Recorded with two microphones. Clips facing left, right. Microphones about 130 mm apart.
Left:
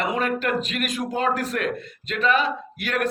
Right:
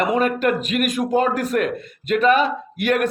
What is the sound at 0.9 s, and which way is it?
A man's voice, 50° right (ahead or behind).